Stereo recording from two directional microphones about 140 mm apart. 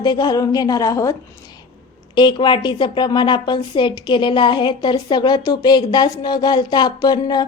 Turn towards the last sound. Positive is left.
turn(degrees=30)  # may be behind; listen again after turning